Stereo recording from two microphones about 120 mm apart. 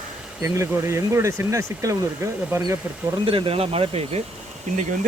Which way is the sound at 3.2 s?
50° right (ahead or behind).